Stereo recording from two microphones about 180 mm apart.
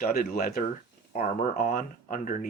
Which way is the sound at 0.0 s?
55° left (ahead or behind).